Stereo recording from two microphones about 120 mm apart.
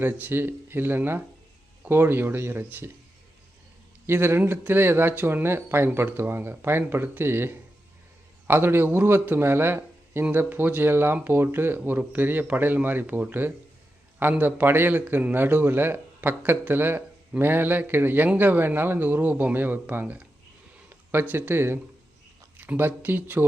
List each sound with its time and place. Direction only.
0.0 s a man's voice: 15° right (ahead or behind)
4.0 s a man's voice: 20° right (ahead or behind)